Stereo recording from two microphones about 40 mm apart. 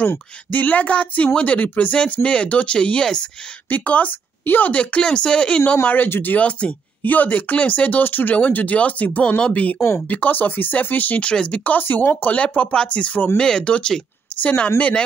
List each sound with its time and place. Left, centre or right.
0.5 s speech: left
3.6 s speech: left
5.0 s speech: left
6.0 s speech: left
6.3 s speech: left
8.4 s speech: left
11.1 s speech: left
11.7 s speech: left
12.4 s speech: left
13.4 s speech: centre